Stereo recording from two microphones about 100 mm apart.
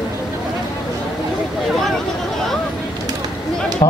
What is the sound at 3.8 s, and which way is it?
Music, 50° left (ahead or behind).